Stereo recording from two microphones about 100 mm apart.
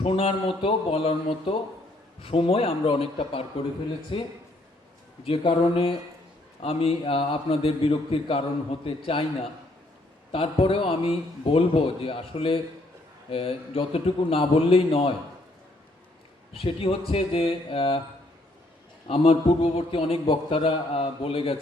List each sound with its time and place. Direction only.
0.0 s a man's voice: 75° left (ahead or behind)
10.3 s a man's voice: 65° left (ahead or behind)
16.5 s a man's voice: 70° left (ahead or behind)
19.0 s a man's voice: 75° left (ahead or behind)